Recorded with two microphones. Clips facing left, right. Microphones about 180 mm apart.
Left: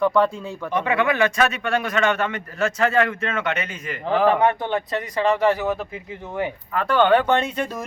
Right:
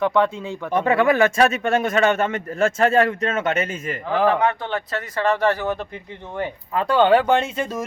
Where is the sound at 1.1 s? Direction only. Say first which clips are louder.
Right 3 dB; 45° right (ahead or behind).